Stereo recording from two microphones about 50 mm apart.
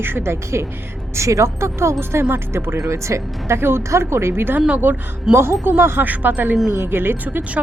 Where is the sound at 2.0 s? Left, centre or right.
Right.